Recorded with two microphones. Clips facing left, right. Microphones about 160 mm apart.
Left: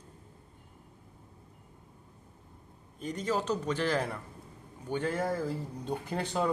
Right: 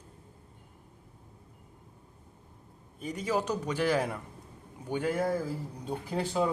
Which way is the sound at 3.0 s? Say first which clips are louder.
Right 1 dB; 10° right (ahead or behind).